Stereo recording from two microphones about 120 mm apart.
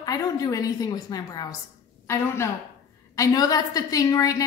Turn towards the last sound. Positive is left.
turn(degrees=30)  # may be behind; listen again after turning